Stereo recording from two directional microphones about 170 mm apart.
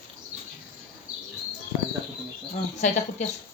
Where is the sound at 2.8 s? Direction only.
45° left (ahead or behind).